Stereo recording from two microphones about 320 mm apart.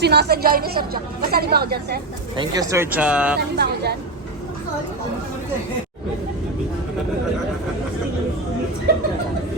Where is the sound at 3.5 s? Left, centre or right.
Right.